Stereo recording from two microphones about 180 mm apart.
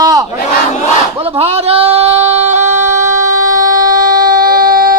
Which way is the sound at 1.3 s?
35° right (ahead or behind).